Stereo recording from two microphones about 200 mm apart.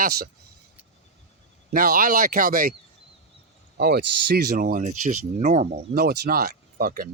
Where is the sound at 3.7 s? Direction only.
55° right (ahead or behind).